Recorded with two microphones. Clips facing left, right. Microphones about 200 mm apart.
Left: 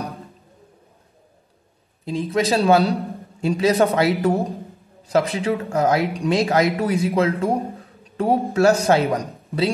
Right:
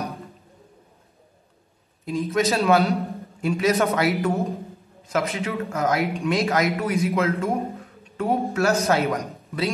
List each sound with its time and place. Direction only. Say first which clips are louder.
2.0 s a man's voice: left 2 dB; 30° left (ahead or behind)